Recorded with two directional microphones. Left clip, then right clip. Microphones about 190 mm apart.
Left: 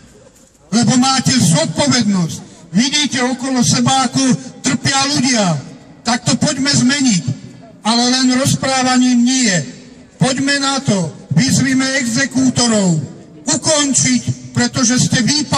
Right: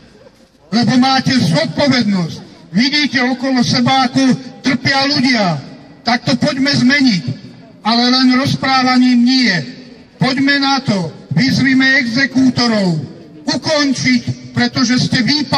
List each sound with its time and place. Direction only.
0.7 s a man's voice: 30° left (ahead or behind)
13.5 s music: 35° left (ahead or behind)
14.6 s a man's voice: 35° left (ahead or behind)